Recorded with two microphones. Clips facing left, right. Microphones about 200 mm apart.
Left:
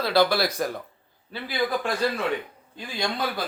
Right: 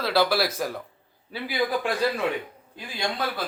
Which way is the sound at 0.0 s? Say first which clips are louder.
Left 1 dB; 5° right (ahead or behind).